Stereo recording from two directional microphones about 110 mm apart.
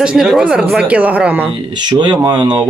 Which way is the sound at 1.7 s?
45° right (ahead or behind).